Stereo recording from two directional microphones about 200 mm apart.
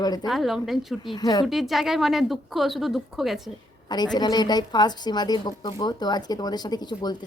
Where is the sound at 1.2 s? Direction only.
20° left (ahead or behind).